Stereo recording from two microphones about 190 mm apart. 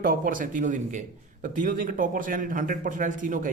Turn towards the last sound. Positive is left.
turn(degrees=-45)  # may be behind; listen again after turning